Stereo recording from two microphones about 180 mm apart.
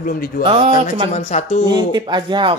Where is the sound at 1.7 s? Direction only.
25° right (ahead or behind).